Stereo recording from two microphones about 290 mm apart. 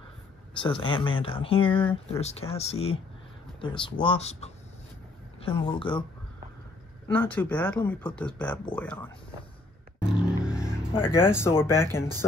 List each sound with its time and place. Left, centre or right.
0.6 s speech: centre
7.1 s speech: centre
10.1 s a sound: centre
11.0 s speech: centre